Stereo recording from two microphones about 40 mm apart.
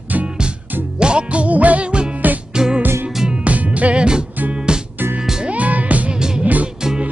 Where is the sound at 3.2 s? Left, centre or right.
Right.